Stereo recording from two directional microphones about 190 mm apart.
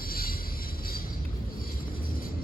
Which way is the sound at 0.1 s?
50° left (ahead or behind).